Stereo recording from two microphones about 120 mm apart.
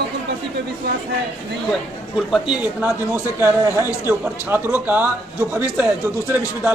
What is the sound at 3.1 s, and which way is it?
Speech, 20° right (ahead or behind).